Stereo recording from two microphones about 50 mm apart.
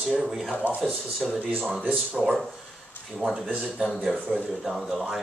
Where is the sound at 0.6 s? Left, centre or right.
Right.